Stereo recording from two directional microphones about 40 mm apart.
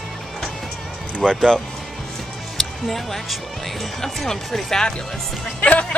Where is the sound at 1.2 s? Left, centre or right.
Centre.